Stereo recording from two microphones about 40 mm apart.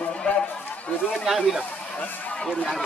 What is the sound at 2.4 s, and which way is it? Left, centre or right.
Speech, centre.